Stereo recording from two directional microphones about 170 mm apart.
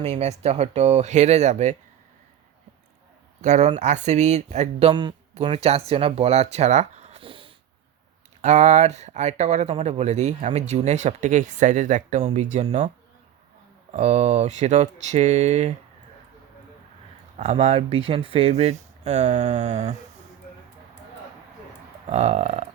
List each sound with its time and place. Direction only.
0.0 s speech: 40° right (ahead or behind)
3.4 s speech: 45° right (ahead or behind)
8.4 s speech: 45° right (ahead or behind)
13.9 s speech: 40° right (ahead or behind)
17.3 s speech: 40° right (ahead or behind)
22.0 s speech: 40° right (ahead or behind)